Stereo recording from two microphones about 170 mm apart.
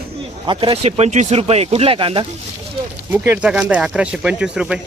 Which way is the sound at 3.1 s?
10° right (ahead or behind).